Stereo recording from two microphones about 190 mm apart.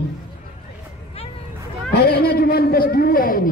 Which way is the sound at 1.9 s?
55° left (ahead or behind).